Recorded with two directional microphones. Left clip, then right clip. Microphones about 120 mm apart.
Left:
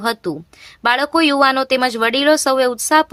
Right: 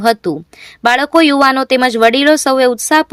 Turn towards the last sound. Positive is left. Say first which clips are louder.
# right 3 dB
turn(degrees=-35)  # may be behind; listen again after turning